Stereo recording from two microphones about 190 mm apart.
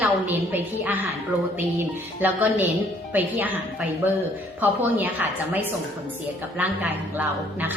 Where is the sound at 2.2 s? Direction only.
10° right (ahead or behind).